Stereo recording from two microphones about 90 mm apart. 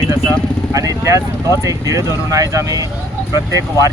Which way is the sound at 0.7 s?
40° right (ahead or behind).